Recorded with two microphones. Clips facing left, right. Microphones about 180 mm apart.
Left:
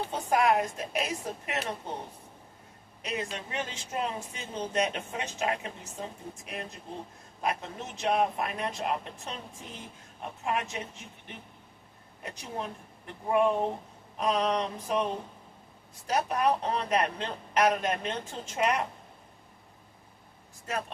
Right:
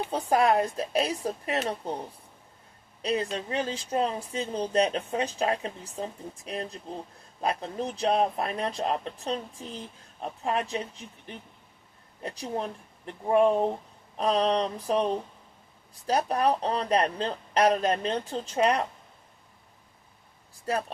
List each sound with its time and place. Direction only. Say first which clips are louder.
0.1 s a woman's voice: right 3 dB; 35° right (ahead or behind)
3.0 s a woman's voice: right 6 dB; 35° right (ahead or behind)
20.7 s a woman's voice: right 5 dB; 35° right (ahead or behind)